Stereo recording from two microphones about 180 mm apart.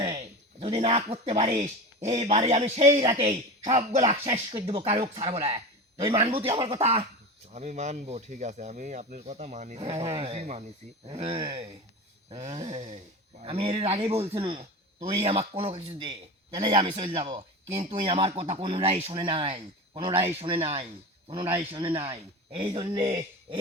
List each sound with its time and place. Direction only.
0.6 s speech: 35° right (ahead or behind)
9.8 s speech: 30° right (ahead or behind)
12.4 s speech: 40° right (ahead or behind)